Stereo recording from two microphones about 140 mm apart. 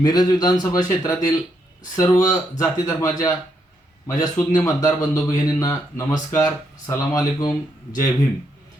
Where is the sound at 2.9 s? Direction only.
25° left (ahead or behind).